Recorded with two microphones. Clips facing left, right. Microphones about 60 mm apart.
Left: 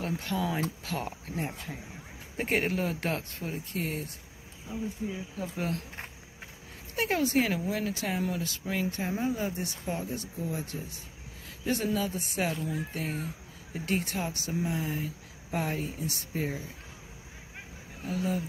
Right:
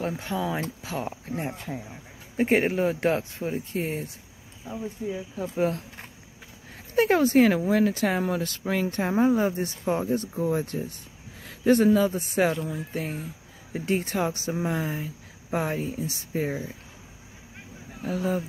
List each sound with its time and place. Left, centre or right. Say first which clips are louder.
0.2 s speech: right 2 dB; right
2.4 s speech: right 7 dB; right
7.0 s speech: right 8 dB; right
10.3 s speech: right 9 dB; right
18.0 s speech: right 4 dB; right